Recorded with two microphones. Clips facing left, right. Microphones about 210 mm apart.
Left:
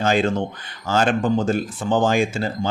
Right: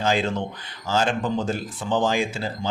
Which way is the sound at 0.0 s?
50° left (ahead or behind).